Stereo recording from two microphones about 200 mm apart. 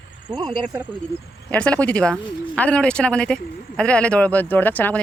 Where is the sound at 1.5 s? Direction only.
5° left (ahead or behind).